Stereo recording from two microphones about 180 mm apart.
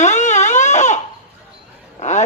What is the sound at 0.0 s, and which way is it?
Crying, 40° left (ahead or behind).